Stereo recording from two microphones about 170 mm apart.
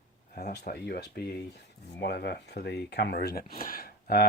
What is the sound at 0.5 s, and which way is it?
Speech, 65° left (ahead or behind).